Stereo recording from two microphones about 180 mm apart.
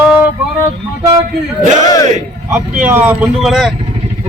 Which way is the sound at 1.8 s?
20° left (ahead or behind).